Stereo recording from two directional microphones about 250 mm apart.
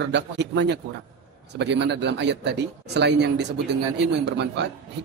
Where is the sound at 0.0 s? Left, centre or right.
Right.